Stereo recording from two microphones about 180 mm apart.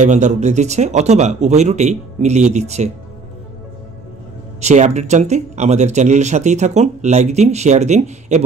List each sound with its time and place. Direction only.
0.0 s speech: 40° right (ahead or behind)
4.6 s speech: 40° right (ahead or behind)